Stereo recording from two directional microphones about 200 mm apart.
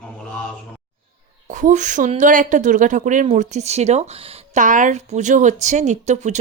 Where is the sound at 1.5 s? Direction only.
40° right (ahead or behind).